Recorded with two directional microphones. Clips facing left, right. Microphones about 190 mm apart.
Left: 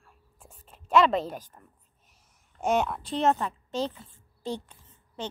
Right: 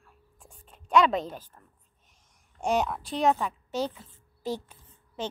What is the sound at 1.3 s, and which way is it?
Speech, 10° left (ahead or behind).